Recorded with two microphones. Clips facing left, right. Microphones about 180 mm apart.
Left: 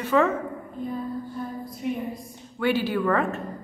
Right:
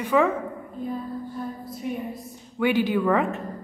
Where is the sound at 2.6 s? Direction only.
15° right (ahead or behind).